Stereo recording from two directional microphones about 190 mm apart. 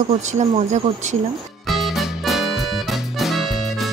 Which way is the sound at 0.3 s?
40° right (ahead or behind).